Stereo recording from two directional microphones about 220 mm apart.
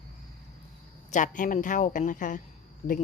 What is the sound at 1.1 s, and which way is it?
Speech, 35° left (ahead or behind).